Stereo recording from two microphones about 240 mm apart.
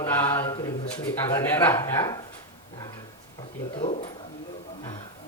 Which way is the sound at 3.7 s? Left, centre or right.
Left.